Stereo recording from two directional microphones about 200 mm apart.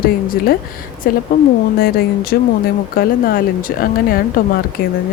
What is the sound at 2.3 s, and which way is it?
Speech, 55° left (ahead or behind).